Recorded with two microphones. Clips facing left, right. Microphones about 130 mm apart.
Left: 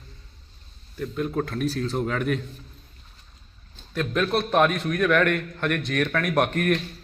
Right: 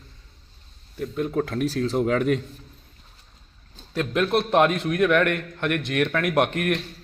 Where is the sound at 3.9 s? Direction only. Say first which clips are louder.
Right 2 dB; 20° right (ahead or behind).